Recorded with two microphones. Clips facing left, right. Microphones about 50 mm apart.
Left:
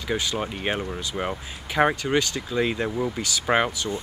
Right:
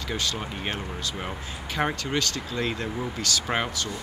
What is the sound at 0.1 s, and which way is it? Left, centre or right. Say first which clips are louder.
Speech: left 4 dB; centre.